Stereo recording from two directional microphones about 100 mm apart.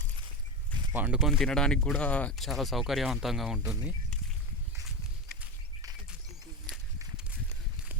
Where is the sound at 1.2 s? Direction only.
Centre (ahead or behind).